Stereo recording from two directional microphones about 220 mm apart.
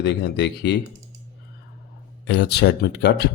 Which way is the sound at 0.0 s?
50° left (ahead or behind).